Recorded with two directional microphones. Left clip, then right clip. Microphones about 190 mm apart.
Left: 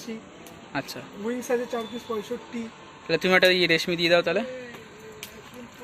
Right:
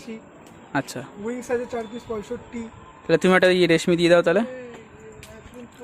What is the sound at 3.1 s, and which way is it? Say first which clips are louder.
Speech: right 3 dB; 45° right (ahead or behind).